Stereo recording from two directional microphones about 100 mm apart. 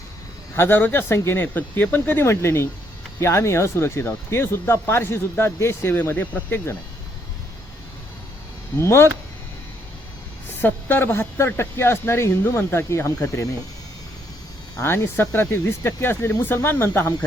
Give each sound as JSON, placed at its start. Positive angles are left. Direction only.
{"t": 0.5, "sound": "speech", "side_deg": 20}
{"t": 8.8, "sound": "speech", "side_deg": 25}
{"t": 10.6, "sound": "speech", "side_deg": 20}
{"t": 14.8, "sound": "speech", "side_deg": 25}